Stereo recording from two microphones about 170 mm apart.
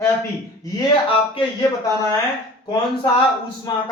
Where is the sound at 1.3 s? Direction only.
25° left (ahead or behind).